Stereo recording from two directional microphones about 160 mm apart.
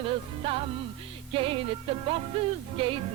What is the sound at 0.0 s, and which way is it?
Music, 35° right (ahead or behind).